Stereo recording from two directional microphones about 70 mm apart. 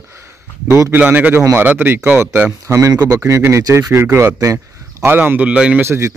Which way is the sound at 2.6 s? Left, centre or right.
Right.